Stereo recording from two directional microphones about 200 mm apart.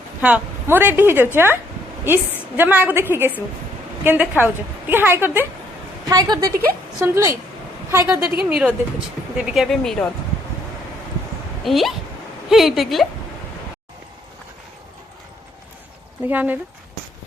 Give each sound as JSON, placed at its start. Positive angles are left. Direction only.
{"t": 0.2, "sound": "a woman's voice", "side_deg": -5}
{"t": 11.6, "sound": "speech", "side_deg": 0}
{"t": 16.2, "sound": "a woman's voice", "side_deg": -10}